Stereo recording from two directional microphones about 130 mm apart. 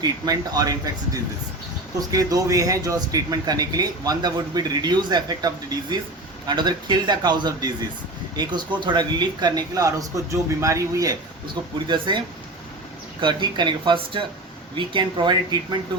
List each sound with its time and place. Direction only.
0.0 s a man's voice: 30° right (ahead or behind)
11.9 s a man's voice: 35° right (ahead or behind)
13.2 s a man's voice: 35° right (ahead or behind)